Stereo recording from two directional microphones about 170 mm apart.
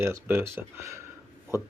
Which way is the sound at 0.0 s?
15° right (ahead or behind).